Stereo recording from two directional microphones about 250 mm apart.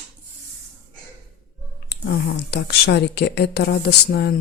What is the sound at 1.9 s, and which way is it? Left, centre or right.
A woman's voice, left.